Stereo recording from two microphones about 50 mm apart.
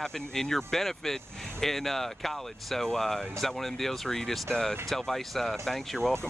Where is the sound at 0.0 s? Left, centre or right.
Centre.